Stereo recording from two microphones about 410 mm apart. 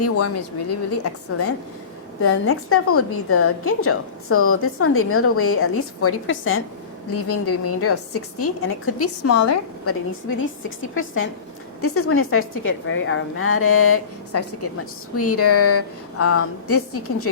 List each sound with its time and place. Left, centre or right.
0.0 s a woman's voice: left